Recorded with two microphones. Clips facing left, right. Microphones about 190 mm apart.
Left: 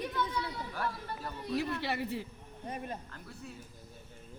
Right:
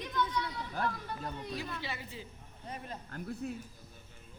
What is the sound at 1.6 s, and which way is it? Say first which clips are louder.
Speech: left 7 dB; 70° left (ahead or behind).